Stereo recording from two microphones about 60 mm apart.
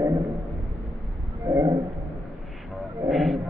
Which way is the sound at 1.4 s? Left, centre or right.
Right.